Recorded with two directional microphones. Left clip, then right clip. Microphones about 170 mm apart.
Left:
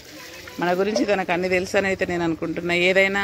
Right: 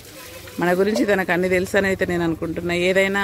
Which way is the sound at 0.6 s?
30° right (ahead or behind).